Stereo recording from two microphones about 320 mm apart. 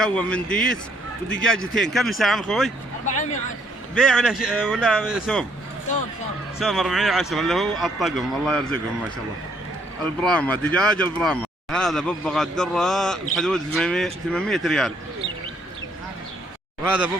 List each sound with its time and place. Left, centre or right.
0.0 s speech: centre
3.9 s speech: centre
6.6 s speech: centre
10.0 s speech: centre
16.8 s speech: centre